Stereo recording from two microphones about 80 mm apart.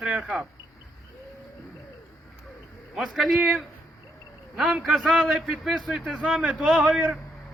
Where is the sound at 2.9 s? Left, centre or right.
Centre.